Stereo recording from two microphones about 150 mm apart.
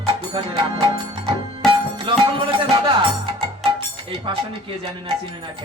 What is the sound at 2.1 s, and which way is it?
Music, 35° right (ahead or behind).